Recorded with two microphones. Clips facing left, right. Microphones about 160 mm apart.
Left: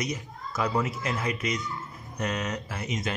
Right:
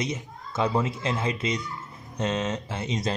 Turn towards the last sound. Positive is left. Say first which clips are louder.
# right 3 dB
turn(degrees=-30)  # may be behind; listen again after turning